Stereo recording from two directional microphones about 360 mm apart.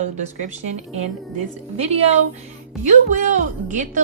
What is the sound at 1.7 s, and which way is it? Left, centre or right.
A woman's voice, centre.